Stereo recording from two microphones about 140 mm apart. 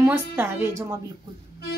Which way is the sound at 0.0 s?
15° right (ahead or behind).